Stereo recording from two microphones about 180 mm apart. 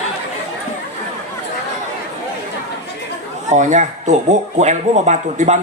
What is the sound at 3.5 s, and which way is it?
Speech, 40° right (ahead or behind).